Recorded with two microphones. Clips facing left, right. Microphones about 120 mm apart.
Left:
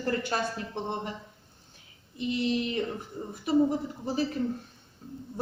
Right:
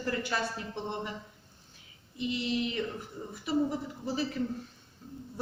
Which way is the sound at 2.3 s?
45° left (ahead or behind).